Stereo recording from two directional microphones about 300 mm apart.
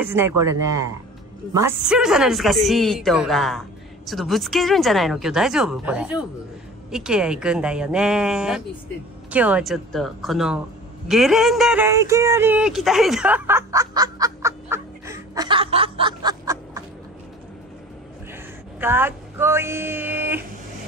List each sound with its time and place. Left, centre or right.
0.0 s speech: centre
18.8 s speech: centre